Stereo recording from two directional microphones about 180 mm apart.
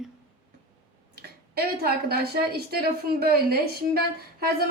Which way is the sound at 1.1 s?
60° right (ahead or behind).